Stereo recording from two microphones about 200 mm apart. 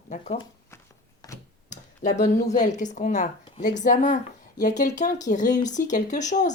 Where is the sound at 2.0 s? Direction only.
35° left (ahead or behind).